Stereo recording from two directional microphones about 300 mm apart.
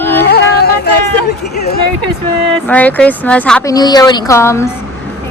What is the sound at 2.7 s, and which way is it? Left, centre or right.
A woman's voice, centre.